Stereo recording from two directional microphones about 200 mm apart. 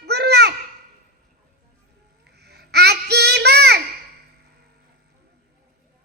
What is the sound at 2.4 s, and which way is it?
Child singing, 55° right (ahead or behind).